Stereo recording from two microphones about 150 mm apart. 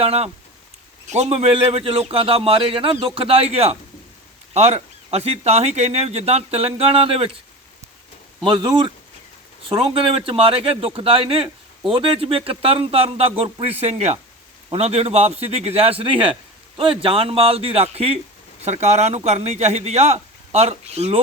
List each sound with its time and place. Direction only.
0.0 s a man's voice: 45° right (ahead or behind)
8.4 s a man's voice: 30° right (ahead or behind)